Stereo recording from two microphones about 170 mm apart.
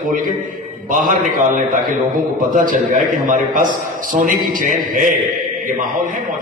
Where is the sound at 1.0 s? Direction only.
55° right (ahead or behind).